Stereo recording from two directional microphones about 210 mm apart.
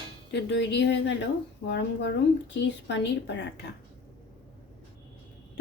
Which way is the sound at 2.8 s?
55° left (ahead or behind).